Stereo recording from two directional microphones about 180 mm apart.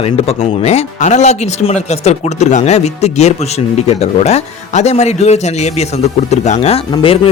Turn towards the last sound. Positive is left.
turn(degrees=30)  # may be behind; listen again after turning